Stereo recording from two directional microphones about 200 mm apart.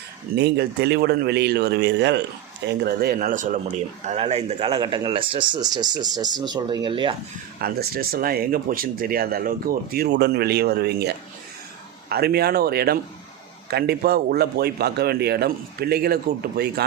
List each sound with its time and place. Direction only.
0.3 s a man's voice: 55° right (ahead or behind); by 7.2 s 25° right (ahead or behind)
7.6 s speech: 50° right (ahead or behind)